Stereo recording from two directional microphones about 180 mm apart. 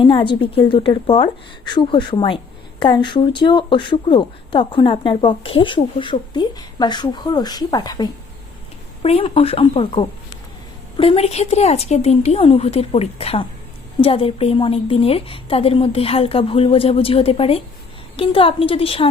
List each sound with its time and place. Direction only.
0.0 s a woman's voice: 25° left (ahead or behind)